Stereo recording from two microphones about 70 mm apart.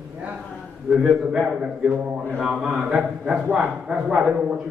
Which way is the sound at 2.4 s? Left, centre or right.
Centre.